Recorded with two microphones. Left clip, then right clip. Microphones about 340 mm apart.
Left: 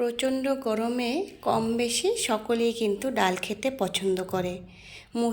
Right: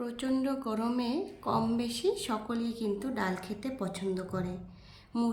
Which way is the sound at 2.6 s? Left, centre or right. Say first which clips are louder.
Left 11 dB; centre.